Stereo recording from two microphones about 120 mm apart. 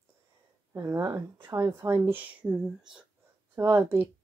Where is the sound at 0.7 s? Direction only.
20° right (ahead or behind).